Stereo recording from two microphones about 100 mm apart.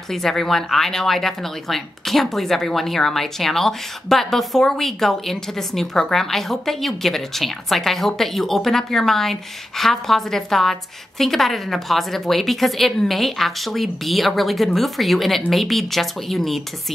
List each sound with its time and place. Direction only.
0.1 s speech: 5° left (ahead or behind)